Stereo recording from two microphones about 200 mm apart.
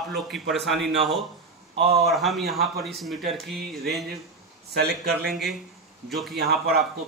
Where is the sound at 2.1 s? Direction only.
Centre (ahead or behind).